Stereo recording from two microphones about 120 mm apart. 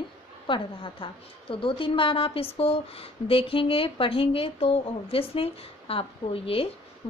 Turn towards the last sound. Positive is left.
turn(degrees=50)  # may be behind; listen again after turning